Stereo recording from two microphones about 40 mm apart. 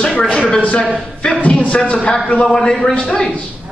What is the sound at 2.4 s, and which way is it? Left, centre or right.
Speech, centre.